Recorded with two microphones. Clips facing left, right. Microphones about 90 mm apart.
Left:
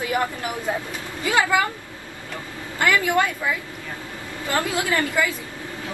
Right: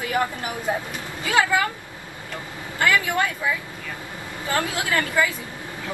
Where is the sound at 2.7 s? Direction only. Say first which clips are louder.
Left 1 dB; 20° left (ahead or behind).